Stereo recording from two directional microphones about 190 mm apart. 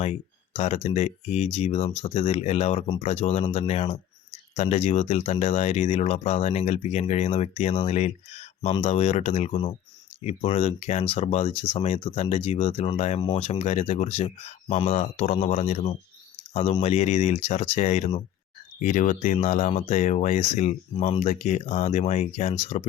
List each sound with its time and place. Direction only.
0.0 s speech: 35° left (ahead or behind)